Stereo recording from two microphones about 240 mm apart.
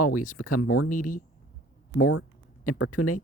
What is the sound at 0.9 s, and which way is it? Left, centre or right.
Speech, left.